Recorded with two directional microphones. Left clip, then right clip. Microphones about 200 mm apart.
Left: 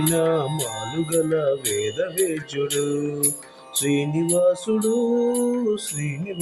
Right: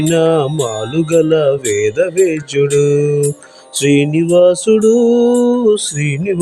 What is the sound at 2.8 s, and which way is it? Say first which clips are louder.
Speech: right 12 dB; 40° right (ahead or behind).